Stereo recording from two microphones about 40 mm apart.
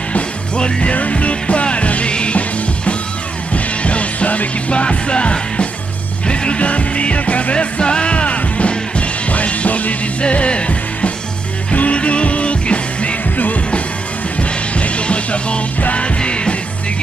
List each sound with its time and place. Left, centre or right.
0.6 s music: left
10.2 s music: left
14.8 s music: left